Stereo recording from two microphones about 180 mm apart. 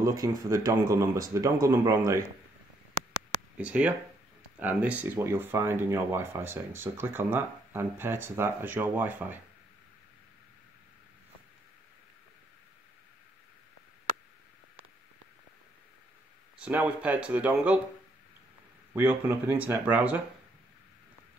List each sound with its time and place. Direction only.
0.0 s speech: 20° right (ahead or behind)
3.5 s speech: 5° right (ahead or behind)
16.5 s speech: 10° right (ahead or behind)
18.9 s speech: 10° right (ahead or behind)